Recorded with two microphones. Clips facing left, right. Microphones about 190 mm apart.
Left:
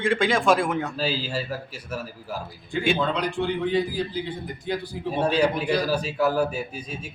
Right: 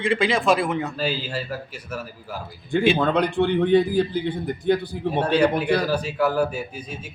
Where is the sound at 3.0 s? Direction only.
55° right (ahead or behind).